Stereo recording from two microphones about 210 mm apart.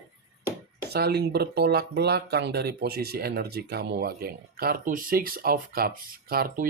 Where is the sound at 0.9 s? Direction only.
50° right (ahead or behind).